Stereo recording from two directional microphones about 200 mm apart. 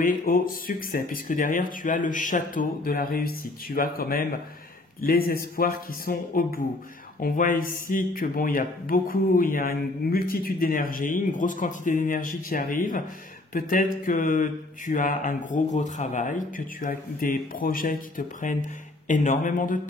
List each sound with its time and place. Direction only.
0.0 s speech: 45° left (ahead or behind)